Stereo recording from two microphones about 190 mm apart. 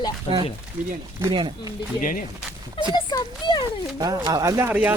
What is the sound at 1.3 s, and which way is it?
Speech, 25° right (ahead or behind).